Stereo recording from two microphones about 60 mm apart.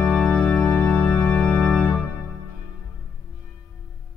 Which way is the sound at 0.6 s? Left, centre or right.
Left.